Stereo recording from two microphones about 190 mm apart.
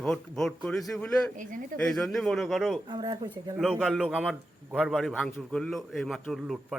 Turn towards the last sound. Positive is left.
turn(degrees=0)  # may be behind; listen again after turning